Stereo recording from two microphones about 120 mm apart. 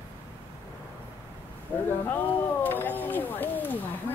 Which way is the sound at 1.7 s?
15° left (ahead or behind).